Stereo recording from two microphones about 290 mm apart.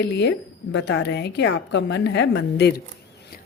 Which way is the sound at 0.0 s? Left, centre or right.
Left.